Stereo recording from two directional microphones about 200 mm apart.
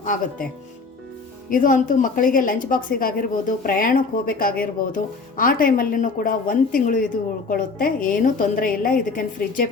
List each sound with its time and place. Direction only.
0.0 s speech: 40° left (ahead or behind)
1.5 s a woman's voice: 40° left (ahead or behind)